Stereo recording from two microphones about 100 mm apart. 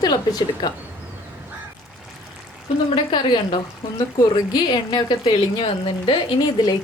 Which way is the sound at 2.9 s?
50° left (ahead or behind).